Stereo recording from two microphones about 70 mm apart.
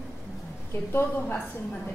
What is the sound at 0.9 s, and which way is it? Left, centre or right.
Speech, left.